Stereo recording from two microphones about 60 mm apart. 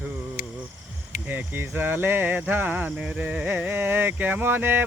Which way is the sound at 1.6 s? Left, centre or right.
Right.